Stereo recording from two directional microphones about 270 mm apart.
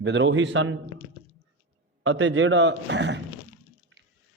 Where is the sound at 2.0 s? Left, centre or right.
Right.